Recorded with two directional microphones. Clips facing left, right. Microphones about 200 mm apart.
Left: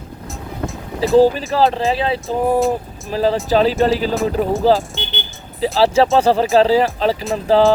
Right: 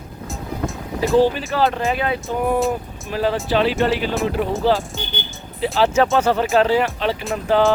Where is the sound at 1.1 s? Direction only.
35° left (ahead or behind).